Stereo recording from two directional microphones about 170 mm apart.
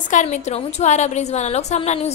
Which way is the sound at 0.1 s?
45° left (ahead or behind).